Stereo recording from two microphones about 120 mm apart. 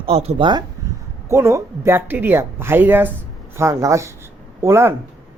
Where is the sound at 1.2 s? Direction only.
25° right (ahead or behind).